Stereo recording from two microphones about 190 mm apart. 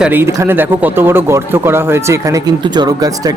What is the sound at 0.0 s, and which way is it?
Speech, 10° right (ahead or behind).